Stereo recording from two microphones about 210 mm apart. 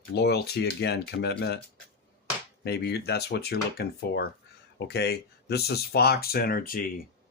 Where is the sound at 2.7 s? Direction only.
50° left (ahead or behind).